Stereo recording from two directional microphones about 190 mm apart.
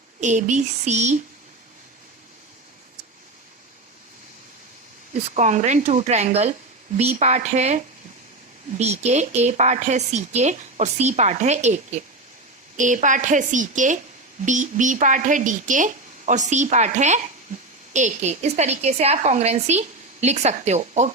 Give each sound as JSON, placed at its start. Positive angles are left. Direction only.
{"t": 0.2, "sound": "speech", "side_deg": -40}
{"t": 5.1, "sound": "speech", "side_deg": -35}